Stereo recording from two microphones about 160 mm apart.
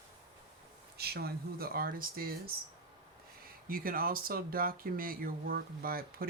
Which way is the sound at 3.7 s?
60° right (ahead or behind).